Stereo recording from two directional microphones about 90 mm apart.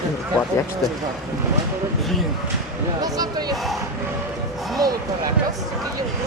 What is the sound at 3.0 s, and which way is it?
Speech, 45° right (ahead or behind).